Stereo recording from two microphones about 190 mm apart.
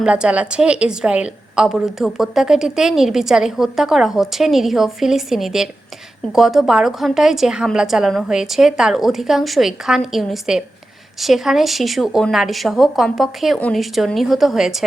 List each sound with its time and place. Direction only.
0.0 s a woman's voice: 5° right (ahead or behind)